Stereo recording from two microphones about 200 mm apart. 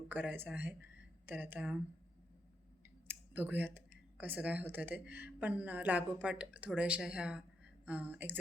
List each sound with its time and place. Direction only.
0.1 s speech: 10° right (ahead or behind)
3.1 s speech: 10° right (ahead or behind)